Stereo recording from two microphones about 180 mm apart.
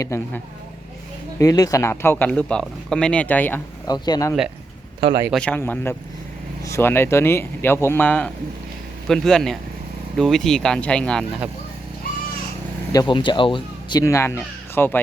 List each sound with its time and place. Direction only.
0.0 s speech: 15° left (ahead or behind)
3.8 s speech: 20° left (ahead or behind)
4.9 s speech: 25° right (ahead or behind)
5.3 s speech: 5° left (ahead or behind)
12.9 s speech: 25° left (ahead or behind)
14.0 s speech: 15° left (ahead or behind)